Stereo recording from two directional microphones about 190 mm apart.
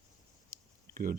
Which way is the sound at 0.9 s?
50° right (ahead or behind).